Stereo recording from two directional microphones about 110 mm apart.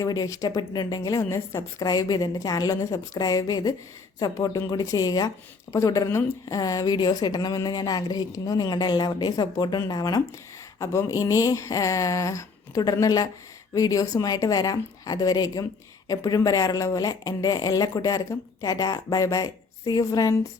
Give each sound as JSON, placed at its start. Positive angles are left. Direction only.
{"t": 0.0, "sound": "speech", "side_deg": 30}